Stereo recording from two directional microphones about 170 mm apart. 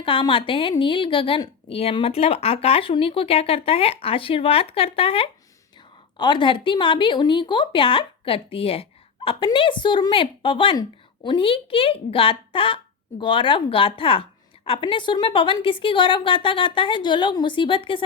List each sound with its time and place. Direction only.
0.0 s a woman's voice: 30° left (ahead or behind)